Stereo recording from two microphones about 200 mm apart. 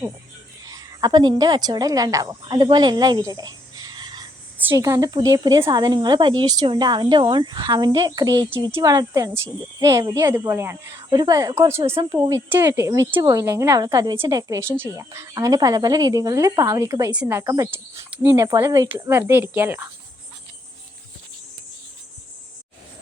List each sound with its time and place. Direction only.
0.7 s a woman's voice: 20° right (ahead or behind)
4.5 s speech: 10° right (ahead or behind)